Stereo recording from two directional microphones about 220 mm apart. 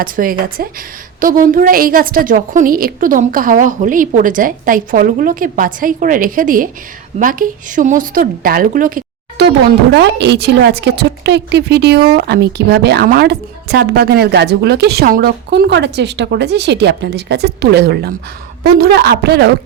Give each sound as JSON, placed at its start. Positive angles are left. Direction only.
{"t": 0.0, "sound": "a woman's voice", "side_deg": -40}
{"t": 9.9, "sound": "a woman's voice", "side_deg": -50}